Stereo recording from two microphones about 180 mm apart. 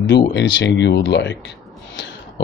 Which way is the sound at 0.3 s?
75° left (ahead or behind).